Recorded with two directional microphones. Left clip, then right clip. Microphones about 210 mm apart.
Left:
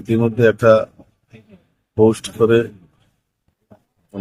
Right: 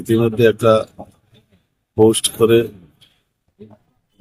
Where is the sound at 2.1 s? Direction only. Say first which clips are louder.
Right 1 dB; centre (ahead or behind).